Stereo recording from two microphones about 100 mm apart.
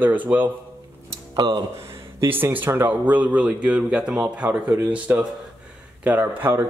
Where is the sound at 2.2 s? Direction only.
20° right (ahead or behind).